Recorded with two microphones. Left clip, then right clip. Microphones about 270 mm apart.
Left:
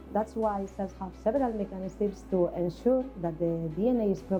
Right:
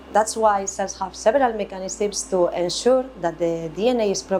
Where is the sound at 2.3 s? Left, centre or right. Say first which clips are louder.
Right 8 dB; centre.